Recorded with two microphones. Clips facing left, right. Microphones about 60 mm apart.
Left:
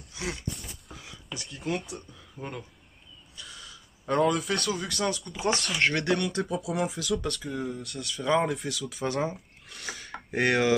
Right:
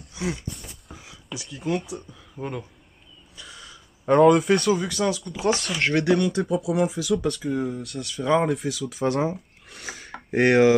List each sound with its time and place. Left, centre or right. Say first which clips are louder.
0.1 s speech: right 5 dB; centre
3.3 s a sound: right 2 dB; centre
4.0 s speech: right 8 dB; right
4.3 s speech: right 10 dB; right
4.6 s speech: right 7 dB; centre